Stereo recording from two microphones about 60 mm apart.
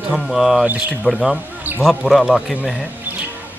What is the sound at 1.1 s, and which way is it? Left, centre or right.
Speech, centre.